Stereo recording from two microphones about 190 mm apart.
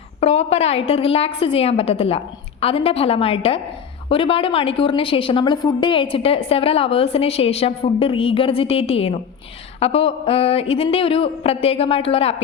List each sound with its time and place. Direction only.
0.2 s a woman's voice: 30° left (ahead or behind)